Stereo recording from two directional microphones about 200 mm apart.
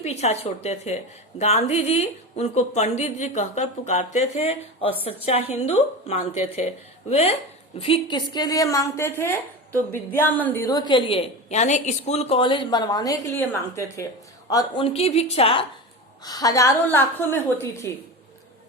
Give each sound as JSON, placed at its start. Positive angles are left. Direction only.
{"t": 0.0, "sound": "a woman's voice", "side_deg": 30}